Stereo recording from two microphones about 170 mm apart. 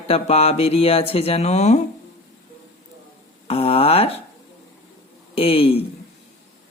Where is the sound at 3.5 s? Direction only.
35° left (ahead or behind).